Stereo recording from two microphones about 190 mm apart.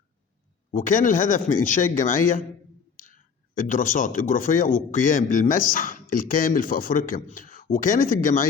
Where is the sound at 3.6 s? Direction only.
45° left (ahead or behind).